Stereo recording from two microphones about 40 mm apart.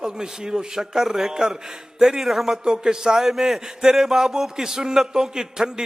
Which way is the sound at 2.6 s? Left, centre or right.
Centre.